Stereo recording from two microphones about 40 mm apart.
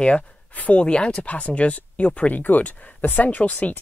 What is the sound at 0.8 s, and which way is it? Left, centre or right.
Speech, left.